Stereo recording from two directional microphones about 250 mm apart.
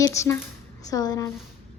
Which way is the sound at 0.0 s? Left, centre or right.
Centre.